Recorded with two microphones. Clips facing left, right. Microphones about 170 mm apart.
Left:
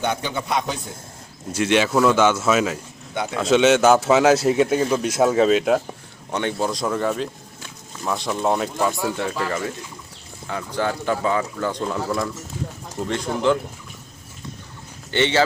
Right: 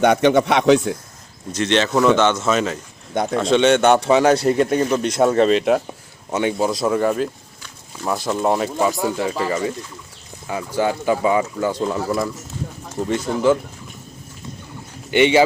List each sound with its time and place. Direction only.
0.0 s a man's voice: 75° right (ahead or behind); by 0.9 s 90° right
1.5 s a man's voice: 10° left (ahead or behind)
15.1 s speech: 15° right (ahead or behind)